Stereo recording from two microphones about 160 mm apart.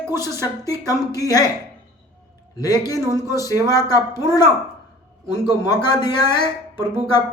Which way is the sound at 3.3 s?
20° left (ahead or behind).